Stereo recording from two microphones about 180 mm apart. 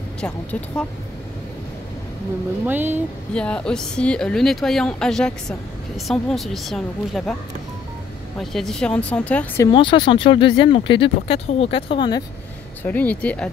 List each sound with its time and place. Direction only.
0.2 s speech: 5° left (ahead or behind)
2.6 s speech: 10° right (ahead or behind)
3.3 s speech: 5° left (ahead or behind)
8.4 s speech: centre (ahead or behind)
9.7 s speech: 25° left (ahead or behind)
12.8 s speech: 10° left (ahead or behind)